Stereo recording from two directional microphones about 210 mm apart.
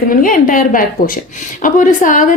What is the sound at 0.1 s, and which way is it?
A woman's voice, 40° left (ahead or behind).